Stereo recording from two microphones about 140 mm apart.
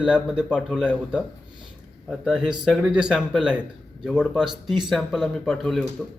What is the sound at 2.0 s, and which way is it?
A man's voice, 5° right (ahead or behind).